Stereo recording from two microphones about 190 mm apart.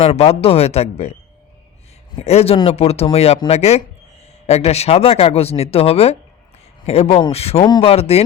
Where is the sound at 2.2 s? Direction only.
35° left (ahead or behind).